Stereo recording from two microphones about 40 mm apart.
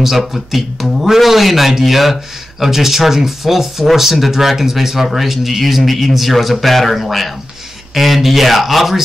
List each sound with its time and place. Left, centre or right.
0.0 s speech: centre